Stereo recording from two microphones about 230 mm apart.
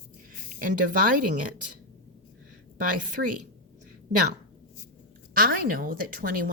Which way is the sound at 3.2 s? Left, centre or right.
Right.